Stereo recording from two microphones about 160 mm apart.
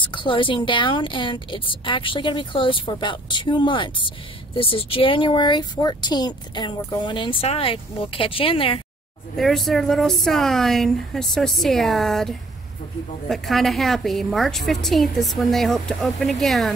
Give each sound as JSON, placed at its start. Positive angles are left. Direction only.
{"t": 0.0, "sound": "speech", "side_deg": 30}
{"t": 9.4, "sound": "a woman's voice", "side_deg": 0}